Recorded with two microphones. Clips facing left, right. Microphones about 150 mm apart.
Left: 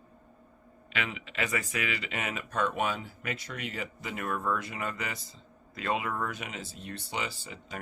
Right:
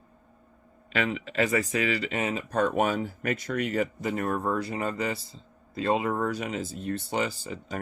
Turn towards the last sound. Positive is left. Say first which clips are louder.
# right 7 dB
turn(degrees=-40)  # may be behind; listen again after turning